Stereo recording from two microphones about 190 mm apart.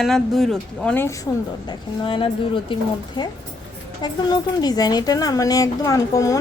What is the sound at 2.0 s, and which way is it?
Speech, 25° left (ahead or behind).